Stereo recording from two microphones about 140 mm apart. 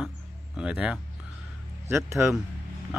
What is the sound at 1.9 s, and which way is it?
Speech, 20° right (ahead or behind).